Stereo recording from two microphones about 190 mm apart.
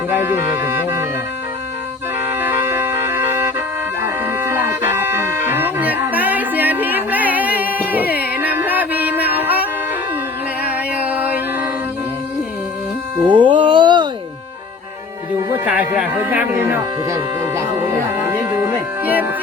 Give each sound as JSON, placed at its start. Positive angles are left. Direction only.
{"t": 2.4, "sound": "music", "side_deg": -10}
{"t": 7.6, "sound": "a sound", "side_deg": -10}
{"t": 8.1, "sound": "music", "side_deg": 55}
{"t": 8.4, "sound": "music", "side_deg": -10}
{"t": 10.9, "sound": "music", "side_deg": -10}
{"t": 13.2, "sound": "music", "side_deg": -25}
{"t": 15.4, "sound": "music", "side_deg": -10}
{"t": 19.0, "sound": "music", "side_deg": -10}